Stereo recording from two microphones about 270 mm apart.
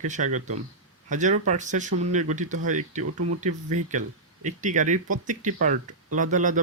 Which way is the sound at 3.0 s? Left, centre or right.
Right.